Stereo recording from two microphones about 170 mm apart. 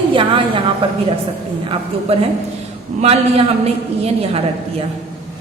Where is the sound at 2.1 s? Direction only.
35° right (ahead or behind).